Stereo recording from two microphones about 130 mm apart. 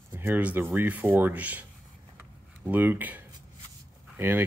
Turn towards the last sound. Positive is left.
turn(degrees=-15)  # may be behind; listen again after turning